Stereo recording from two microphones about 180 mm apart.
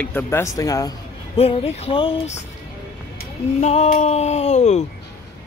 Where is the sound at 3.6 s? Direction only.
40° left (ahead or behind).